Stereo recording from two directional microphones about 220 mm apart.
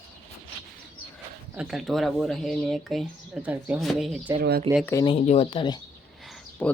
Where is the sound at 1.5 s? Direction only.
Centre (ahead or behind).